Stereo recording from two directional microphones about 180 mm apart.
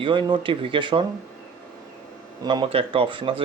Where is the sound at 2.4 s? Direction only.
25° right (ahead or behind).